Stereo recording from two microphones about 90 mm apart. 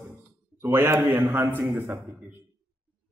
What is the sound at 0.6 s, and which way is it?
A man's voice, 30° right (ahead or behind).